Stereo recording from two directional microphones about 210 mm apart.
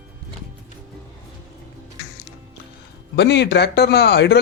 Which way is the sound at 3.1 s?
55° left (ahead or behind).